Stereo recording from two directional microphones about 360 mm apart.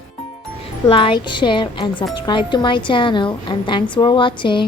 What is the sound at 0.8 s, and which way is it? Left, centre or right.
Speech, centre.